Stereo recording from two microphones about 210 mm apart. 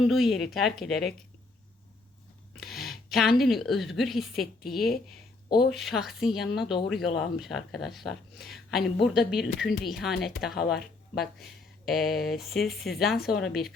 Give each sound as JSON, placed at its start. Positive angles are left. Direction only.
{"t": 0.0, "sound": "speech", "side_deg": 0}
{"t": 2.6, "sound": "a woman's voice", "side_deg": 0}
{"t": 10.8, "sound": "speech", "side_deg": 50}
{"t": 11.9, "sound": "speech", "side_deg": 0}